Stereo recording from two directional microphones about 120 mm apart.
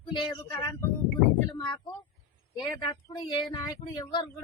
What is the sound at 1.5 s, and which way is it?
Speech, 35° left (ahead or behind).